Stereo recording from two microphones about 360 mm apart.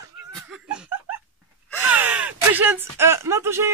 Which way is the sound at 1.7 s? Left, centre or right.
Centre.